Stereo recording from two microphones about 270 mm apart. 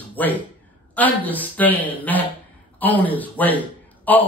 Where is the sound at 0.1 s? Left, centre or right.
Centre.